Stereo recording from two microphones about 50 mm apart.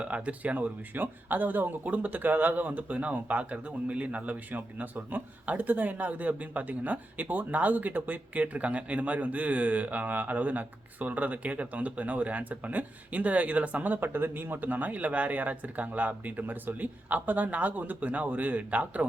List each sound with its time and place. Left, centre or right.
0.0 s speech: right